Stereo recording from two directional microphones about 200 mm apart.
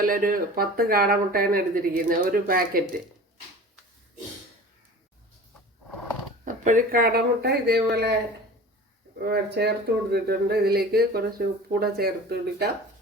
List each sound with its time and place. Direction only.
0.0 s speech: 45° right (ahead or behind)
6.4 s speech: 40° right (ahead or behind)
9.2 s speech: 50° right (ahead or behind)